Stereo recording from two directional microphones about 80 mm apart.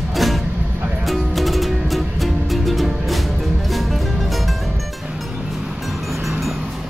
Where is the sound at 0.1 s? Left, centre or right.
Centre.